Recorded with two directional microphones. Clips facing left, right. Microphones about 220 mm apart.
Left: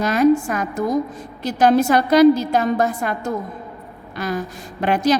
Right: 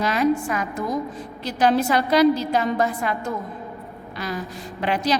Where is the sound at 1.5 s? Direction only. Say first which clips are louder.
Left 4 dB; 45° left (ahead or behind).